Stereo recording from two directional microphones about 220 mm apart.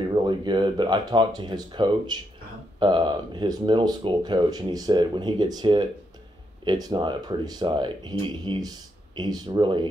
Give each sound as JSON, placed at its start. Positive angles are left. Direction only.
{"t": 0.1, "sound": "speech", "side_deg": -20}